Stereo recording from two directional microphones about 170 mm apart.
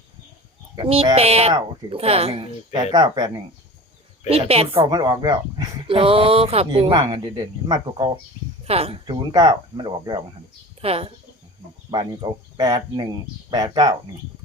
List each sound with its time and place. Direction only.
0.8 s speech: 30° right (ahead or behind)
2.9 s speech: 25° right (ahead or behind)
4.3 s speech: 35° right (ahead or behind)
10.8 s speech: 35° right (ahead or behind)
11.9 s speech: 25° right (ahead or behind)